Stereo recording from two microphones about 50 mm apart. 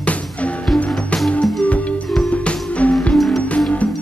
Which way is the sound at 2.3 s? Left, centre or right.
Left.